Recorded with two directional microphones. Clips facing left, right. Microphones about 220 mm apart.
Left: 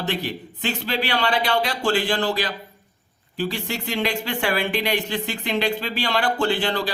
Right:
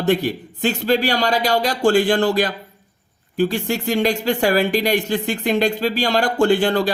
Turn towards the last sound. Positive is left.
turn(degrees=-50)  # may be behind; listen again after turning